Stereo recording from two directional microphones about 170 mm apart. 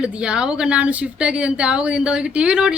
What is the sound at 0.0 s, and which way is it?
A woman's voice, 5° right (ahead or behind).